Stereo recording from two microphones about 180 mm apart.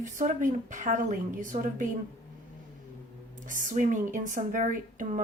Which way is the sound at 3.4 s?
45° right (ahead or behind).